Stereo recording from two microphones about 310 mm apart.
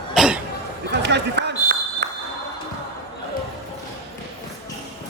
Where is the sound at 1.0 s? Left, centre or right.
Right.